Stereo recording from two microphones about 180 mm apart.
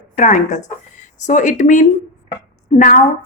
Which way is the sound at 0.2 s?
45° left (ahead or behind).